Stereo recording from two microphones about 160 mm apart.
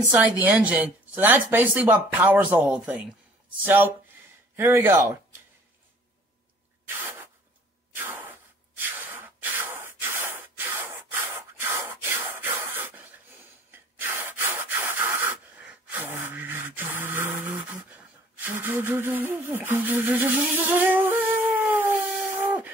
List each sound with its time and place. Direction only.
0.0 s speech: 10° right (ahead or behind)
7.9 s a sound: 10° right (ahead or behind)
18.4 s humming: 10° right (ahead or behind)